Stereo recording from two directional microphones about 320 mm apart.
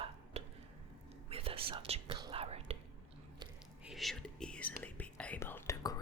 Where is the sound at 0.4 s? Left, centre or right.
Right.